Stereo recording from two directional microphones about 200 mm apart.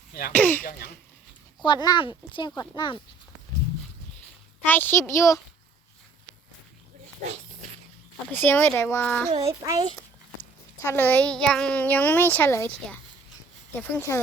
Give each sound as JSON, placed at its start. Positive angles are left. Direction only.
{"t": 0.1, "sound": "speech", "side_deg": 50}
{"t": 0.3, "sound": "a child's voice", "side_deg": 10}
{"t": 0.6, "sound": "speech", "side_deg": 45}
{"t": 1.6, "sound": "speech", "side_deg": 20}
{"t": 4.6, "sound": "a child's voice", "side_deg": 10}
{"t": 8.3, "sound": "a child's voice", "side_deg": 10}
{"t": 10.8, "sound": "a child's voice", "side_deg": 10}
{"t": 13.7, "sound": "a child's voice", "side_deg": 10}